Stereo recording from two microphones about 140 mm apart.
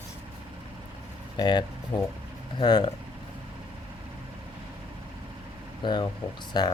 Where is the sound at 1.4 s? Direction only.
30° left (ahead or behind).